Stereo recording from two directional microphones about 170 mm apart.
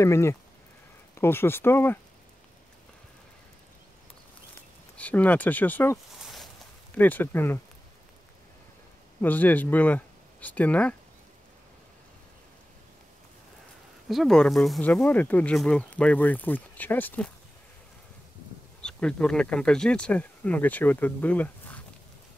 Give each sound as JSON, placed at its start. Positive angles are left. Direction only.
{"t": 0.0, "sound": "speech", "side_deg": 15}
{"t": 4.9, "sound": "speech", "side_deg": 10}
{"t": 6.2, "sound": "a sound", "side_deg": 0}
{"t": 7.0, "sound": "speech", "side_deg": 10}
{"t": 9.2, "sound": "speech", "side_deg": 10}
{"t": 14.0, "sound": "speech", "side_deg": 0}
{"t": 18.8, "sound": "speech", "side_deg": 5}